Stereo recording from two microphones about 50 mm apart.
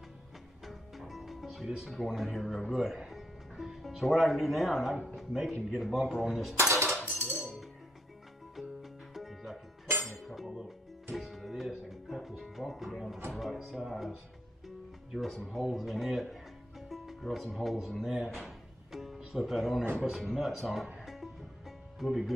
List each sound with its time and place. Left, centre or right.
0.7 s music: centre
2.1 s a man's voice: centre
3.1 s music: centre
4.2 s a man's voice: centre
6.6 s a sound: right
9.1 s music: centre
15.0 s speech: centre
16.9 s music: centre
17.2 s speech: centre
19.8 s a man's voice: right
20.2 s a man's voice: centre
21.0 s music: centre